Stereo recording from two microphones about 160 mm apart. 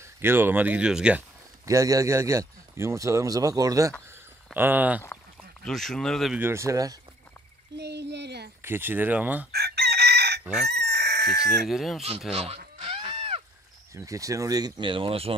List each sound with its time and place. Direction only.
0.0 s speech: 15° right (ahead or behind)
1.7 s a man's voice: 20° right (ahead or behind)
4.6 s speech: 10° right (ahead or behind)
5.0 s a sound: 15° left (ahead or behind)
5.7 s speech: centre (ahead or behind)
6.4 s a man's voice: 15° right (ahead or behind)
7.7 s a sound: 90° right
8.6 s speech: 15° right (ahead or behind)
9.5 s chicken: 85° right
11.6 s speech: centre (ahead or behind)
12.8 s a sound: 40° right (ahead or behind)
13.9 s a man's voice: 20° right (ahead or behind); by 15.3 s 35° right (ahead or behind)